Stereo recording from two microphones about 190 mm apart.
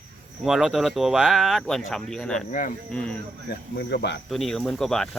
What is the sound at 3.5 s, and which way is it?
Speech, 60° left (ahead or behind).